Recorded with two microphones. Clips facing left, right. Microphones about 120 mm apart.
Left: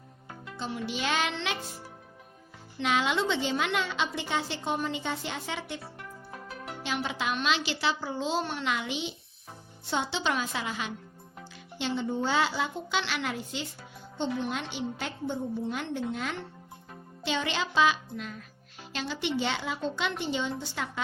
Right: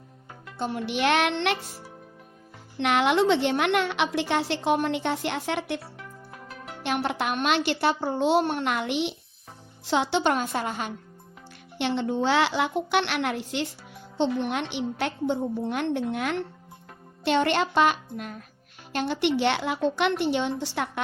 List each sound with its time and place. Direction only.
0.6 s a woman's voice: 60° right (ahead or behind)
2.7 s a woman's voice: 60° right (ahead or behind)
6.8 s a woman's voice: 60° right (ahead or behind)
9.9 s a woman's voice: 75° right (ahead or behind); by 10.9 s 50° right (ahead or behind)
11.8 s a woman's voice: 70° right (ahead or behind)